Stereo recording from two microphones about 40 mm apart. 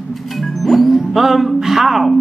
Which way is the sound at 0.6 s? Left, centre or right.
Centre.